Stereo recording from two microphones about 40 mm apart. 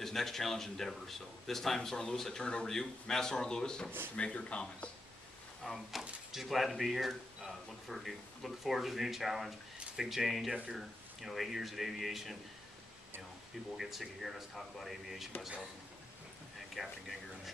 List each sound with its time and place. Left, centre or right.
0.0 s speech: centre; by 4.9 s left
5.6 s speech: centre
13.7 s speech: centre
16.7 s speech: centre